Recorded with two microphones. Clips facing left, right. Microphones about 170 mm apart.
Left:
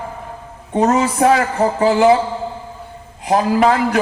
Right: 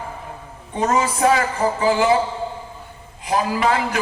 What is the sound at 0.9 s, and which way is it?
A man's voice, 60° left (ahead or behind).